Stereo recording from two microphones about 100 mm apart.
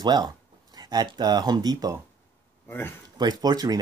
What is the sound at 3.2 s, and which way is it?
Speech, 40° right (ahead or behind).